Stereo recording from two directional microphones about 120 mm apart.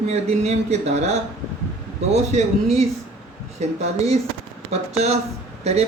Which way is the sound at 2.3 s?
65° right (ahead or behind).